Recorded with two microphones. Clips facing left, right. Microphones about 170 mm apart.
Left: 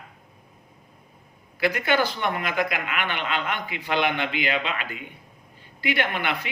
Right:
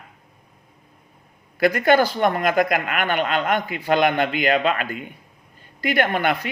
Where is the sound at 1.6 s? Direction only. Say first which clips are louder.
Right 6 dB; 45° right (ahead or behind).